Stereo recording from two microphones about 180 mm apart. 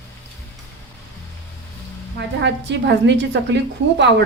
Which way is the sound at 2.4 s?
75° right (ahead or behind).